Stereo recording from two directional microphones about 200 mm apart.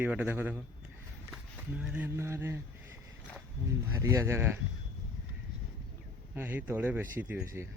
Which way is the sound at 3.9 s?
15° right (ahead or behind).